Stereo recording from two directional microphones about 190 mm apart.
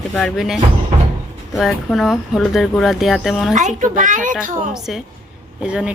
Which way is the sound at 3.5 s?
40° right (ahead or behind).